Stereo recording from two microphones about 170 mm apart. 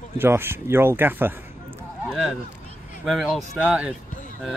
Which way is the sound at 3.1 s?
Centre (ahead or behind).